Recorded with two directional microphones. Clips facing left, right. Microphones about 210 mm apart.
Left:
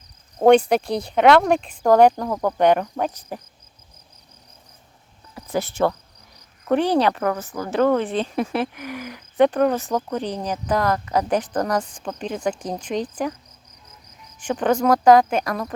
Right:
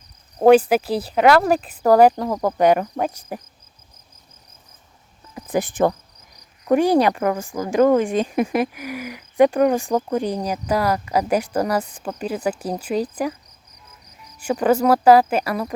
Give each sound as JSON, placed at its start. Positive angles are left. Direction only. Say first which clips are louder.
{"t": 0.3, "sound": "speech", "louder": "right 1 dB", "side_deg": -5}
{"t": 2.3, "sound": "speech", "louder": "right 1 dB", "side_deg": -20}
{"t": 2.6, "sound": "speech", "louder": "right 1 dB", "side_deg": -5}
{"t": 5.3, "sound": "cricket", "louder": "right 3 dB", "side_deg": -15}
{"t": 6.7, "sound": "speech", "louder": "right 3 dB", "side_deg": -10}
{"t": 14.4, "sound": "speech", "louder": "right 2 dB", "side_deg": -5}